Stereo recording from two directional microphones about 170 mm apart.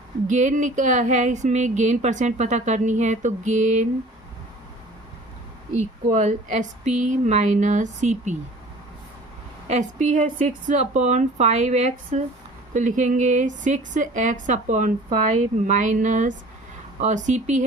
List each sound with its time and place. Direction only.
0.3 s speech: 45° right (ahead or behind)
6.1 s speech: 45° right (ahead or behind)
9.6 s speech: 45° right (ahead or behind)